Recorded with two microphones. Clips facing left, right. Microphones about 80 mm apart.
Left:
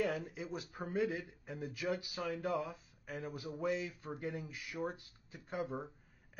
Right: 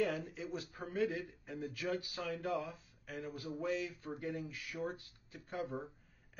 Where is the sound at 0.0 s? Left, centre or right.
Centre.